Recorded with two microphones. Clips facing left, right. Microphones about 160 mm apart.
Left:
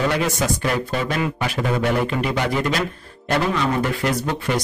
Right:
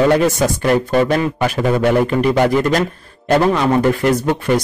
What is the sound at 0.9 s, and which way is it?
Speech, 55° right (ahead or behind).